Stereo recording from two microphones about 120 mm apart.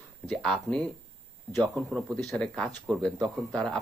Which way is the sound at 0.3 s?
5° left (ahead or behind).